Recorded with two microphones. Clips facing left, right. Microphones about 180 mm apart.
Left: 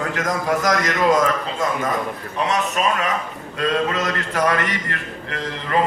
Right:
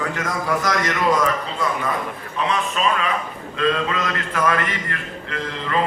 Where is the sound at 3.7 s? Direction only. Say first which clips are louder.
Left 2 dB; 40° left (ahead or behind).